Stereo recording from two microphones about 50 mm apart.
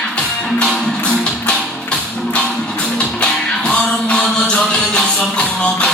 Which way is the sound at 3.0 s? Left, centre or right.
Centre.